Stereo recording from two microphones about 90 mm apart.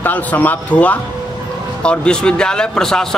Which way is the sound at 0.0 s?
20° left (ahead or behind).